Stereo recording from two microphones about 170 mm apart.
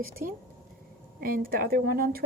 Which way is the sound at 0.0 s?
60° right (ahead or behind).